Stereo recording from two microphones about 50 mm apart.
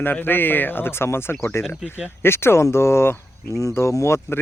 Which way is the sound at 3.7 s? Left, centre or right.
Left.